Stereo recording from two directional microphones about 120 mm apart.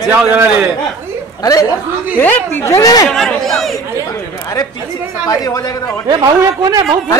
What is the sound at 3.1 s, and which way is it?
Speech, 5° left (ahead or behind).